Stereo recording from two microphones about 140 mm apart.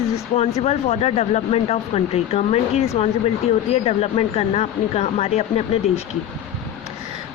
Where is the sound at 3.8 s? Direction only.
45° left (ahead or behind).